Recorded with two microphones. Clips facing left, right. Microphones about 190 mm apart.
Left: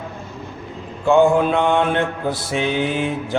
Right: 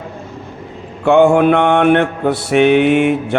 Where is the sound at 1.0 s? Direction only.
70° right (ahead or behind).